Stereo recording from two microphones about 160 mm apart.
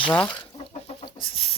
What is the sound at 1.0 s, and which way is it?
Chicken, 35° left (ahead or behind).